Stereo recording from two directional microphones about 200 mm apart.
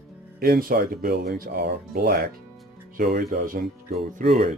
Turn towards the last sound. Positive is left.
turn(degrees=-30)  # may be behind; listen again after turning